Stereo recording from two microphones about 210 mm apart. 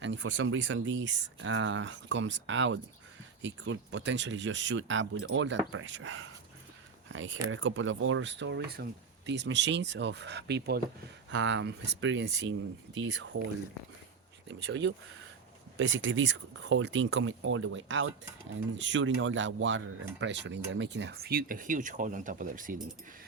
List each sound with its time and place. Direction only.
0.0 s speech: 60° right (ahead or behind)
11.3 s speech: 65° right (ahead or behind)
14.4 s speech: 60° right (ahead or behind); by 22.8 s 40° right (ahead or behind)